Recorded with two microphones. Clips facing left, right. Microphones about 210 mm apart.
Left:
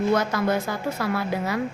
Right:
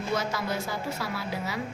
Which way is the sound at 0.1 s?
55° left (ahead or behind).